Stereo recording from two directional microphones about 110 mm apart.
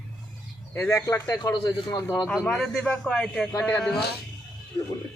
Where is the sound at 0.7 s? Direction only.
25° left (ahead or behind); by 2.0 s 40° left (ahead or behind).